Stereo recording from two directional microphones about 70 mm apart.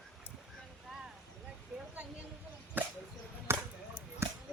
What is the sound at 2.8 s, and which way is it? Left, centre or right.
Whip, right.